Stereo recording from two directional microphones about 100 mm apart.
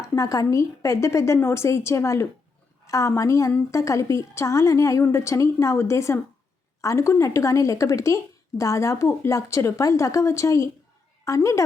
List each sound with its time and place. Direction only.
0.1 s a woman's voice: 30° left (ahead or behind)